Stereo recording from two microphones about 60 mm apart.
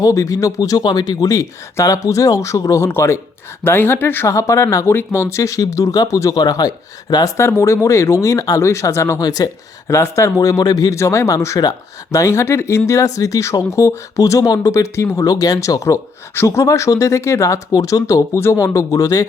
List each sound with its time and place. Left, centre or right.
0.0 s speech: left
2.8 s speech: left
4.3 s speech: left
4.9 s speech: left
5.4 s speech: left
7.3 s speech: left
9.1 s speech: left
9.9 s speech: left
10.9 s speech: left
14.2 s speech: left
15.1 s speech: left
17.7 s speech: left
18.3 s speech: left
18.6 s speech: left